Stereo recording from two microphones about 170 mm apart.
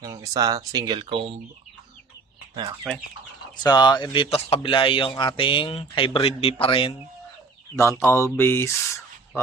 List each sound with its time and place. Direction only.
0.0 s speech: 20° right (ahead or behind)
2.9 s speech: centre (ahead or behind)
3.6 s speech: 25° left (ahead or behind)
7.8 s speech: 15° left (ahead or behind)